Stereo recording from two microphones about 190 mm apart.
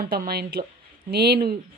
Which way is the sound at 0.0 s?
55° right (ahead or behind).